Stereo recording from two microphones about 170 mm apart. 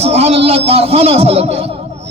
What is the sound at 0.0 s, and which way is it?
A man's voice, 35° right (ahead or behind).